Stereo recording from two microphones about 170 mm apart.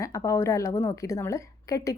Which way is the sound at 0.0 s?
20° left (ahead or behind).